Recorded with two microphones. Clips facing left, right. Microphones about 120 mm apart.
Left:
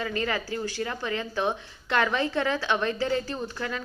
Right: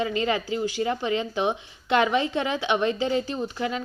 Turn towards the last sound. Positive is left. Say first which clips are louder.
# right 4 dB
turn(degrees=-20)  # may be behind; listen again after turning